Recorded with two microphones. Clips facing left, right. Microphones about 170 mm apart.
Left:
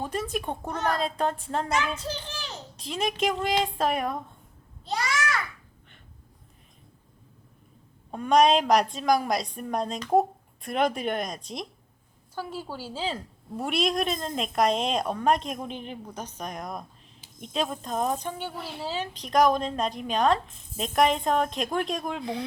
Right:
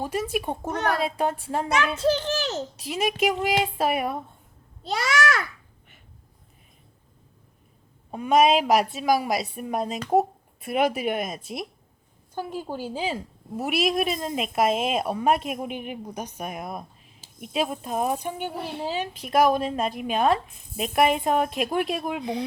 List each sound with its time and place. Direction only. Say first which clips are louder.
0.0 s a woman's voice: right 3 dB; 5° right (ahead or behind)
2.0 s a child's voice: right 12 dB; 80° right
2.7 s a woman's voice: left 1 dB; 5° right (ahead or behind)
4.8 s babbling: right 4 dB; 80° right
8.1 s a woman's voice: right 1 dB; 5° right (ahead or behind)
12.3 s a woman's voice: right 4 dB; 15° right (ahead or behind)
22.2 s a woman's voice: right 3 dB; 15° right (ahead or behind)